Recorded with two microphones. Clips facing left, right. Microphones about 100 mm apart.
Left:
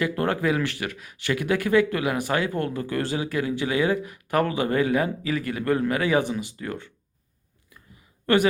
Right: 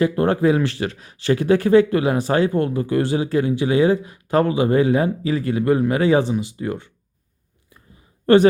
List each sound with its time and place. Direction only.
0.0 s speech: 25° right (ahead or behind)